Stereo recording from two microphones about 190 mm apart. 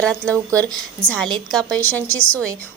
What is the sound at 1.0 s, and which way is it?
Speech, 5° left (ahead or behind).